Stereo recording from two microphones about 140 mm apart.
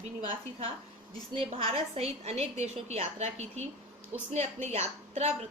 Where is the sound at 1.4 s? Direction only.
45° right (ahead or behind).